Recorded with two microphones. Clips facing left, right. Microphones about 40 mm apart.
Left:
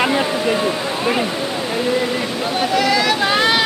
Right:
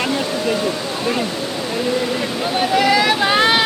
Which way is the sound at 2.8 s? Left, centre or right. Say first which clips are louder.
Right 2 dB; centre.